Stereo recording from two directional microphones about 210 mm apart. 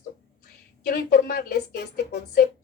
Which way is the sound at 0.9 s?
45° left (ahead or behind).